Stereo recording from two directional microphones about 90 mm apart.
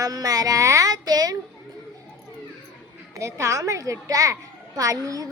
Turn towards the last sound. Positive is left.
turn(degrees=-40)  # may be behind; listen again after turning